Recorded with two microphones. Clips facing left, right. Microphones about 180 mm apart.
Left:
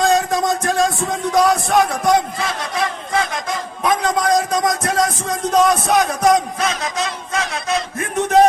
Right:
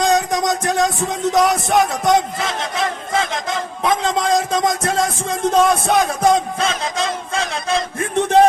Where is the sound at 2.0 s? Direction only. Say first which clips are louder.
Even; 20° right (ahead or behind).